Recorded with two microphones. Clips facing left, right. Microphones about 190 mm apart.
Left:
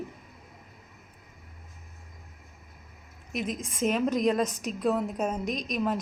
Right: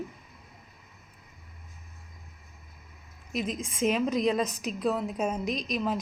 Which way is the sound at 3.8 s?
Centre (ahead or behind).